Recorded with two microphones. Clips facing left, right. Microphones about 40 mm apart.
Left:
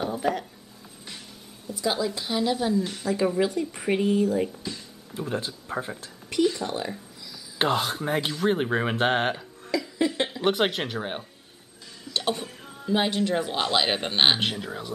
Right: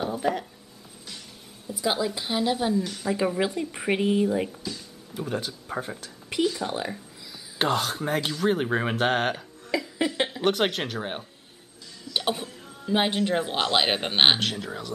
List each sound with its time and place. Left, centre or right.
0.0 s speech: centre
1.7 s speech: centre
5.3 s speech: centre
6.6 s speech: centre
7.5 s speech: centre
9.7 s a sound: right
10.4 s speech: centre
12.1 s a sound: centre
12.9 s speech: centre
14.4 s speech: centre